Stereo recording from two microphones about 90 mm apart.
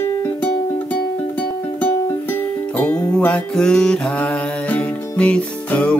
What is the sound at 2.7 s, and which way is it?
Music, 15° left (ahead or behind).